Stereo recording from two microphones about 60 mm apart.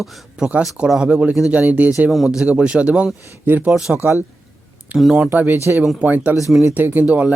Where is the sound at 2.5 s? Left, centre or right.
Centre.